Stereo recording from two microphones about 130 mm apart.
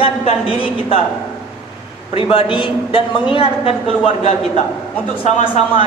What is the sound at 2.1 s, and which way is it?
A man's voice, 45° left (ahead or behind).